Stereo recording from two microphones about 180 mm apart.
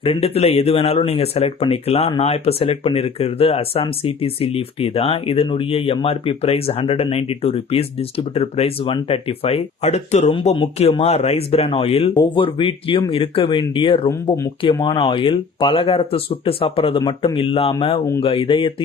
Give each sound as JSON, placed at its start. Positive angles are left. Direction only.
{"t": 0.0, "sound": "speech", "side_deg": 30}